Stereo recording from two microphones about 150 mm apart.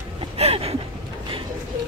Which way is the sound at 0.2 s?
40° right (ahead or behind).